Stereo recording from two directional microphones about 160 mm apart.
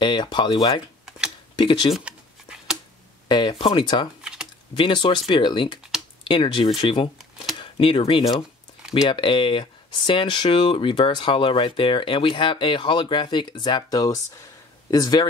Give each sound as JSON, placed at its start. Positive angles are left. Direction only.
{"t": 0.0, "sound": "speech", "side_deg": 30}
{"t": 2.0, "sound": "a sound", "side_deg": -5}
{"t": 3.3, "sound": "speech", "side_deg": 30}